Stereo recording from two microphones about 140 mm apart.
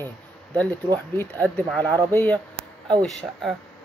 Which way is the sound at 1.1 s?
15° left (ahead or behind).